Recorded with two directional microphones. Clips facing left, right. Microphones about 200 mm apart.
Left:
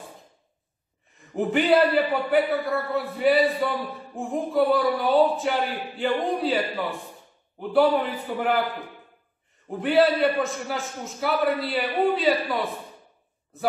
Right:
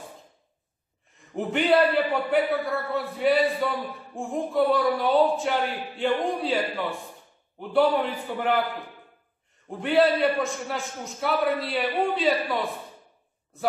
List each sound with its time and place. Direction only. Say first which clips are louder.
1.3 s a man's voice: left 2 dB; centre (ahead or behind)
7.7 s a man's voice: left 1 dB; centre (ahead or behind)
9.7 s a man's voice: left 1 dB; centre (ahead or behind)